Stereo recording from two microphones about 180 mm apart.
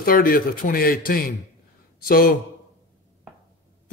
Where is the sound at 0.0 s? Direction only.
55° left (ahead or behind).